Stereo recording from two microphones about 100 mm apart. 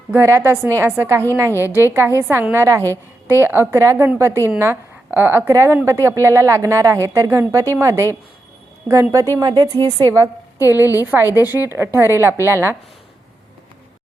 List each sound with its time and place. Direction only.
0.1 s a woman's voice: 25° right (ahead or behind)
11.0 s a woman's voice: 20° right (ahead or behind)